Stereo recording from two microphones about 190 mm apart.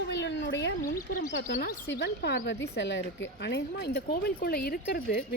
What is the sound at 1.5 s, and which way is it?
Speech, 60° left (ahead or behind).